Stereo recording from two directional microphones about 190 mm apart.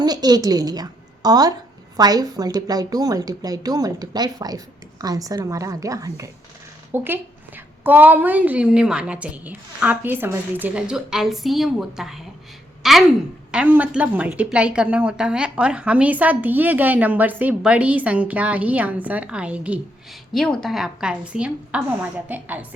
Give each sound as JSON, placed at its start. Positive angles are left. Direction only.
{"t": 0.0, "sound": "a woman's voice", "side_deg": -20}